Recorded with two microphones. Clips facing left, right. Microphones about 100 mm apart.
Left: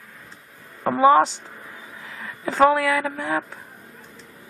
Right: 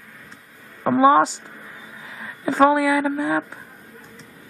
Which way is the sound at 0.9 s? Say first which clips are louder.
Right 1 dB; 15° right (ahead or behind).